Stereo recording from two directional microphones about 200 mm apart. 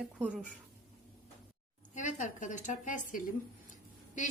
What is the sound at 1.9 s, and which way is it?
A woman's voice, 40° left (ahead or behind).